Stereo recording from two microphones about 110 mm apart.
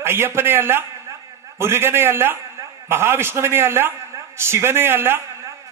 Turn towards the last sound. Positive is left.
turn(degrees=-20)  # may be behind; listen again after turning